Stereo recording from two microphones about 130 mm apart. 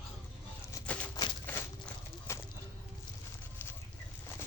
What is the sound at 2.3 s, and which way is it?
Bird, 20° left (ahead or behind).